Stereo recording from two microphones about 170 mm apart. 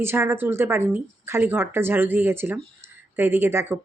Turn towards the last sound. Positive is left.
turn(degrees=-15)  # may be behind; listen again after turning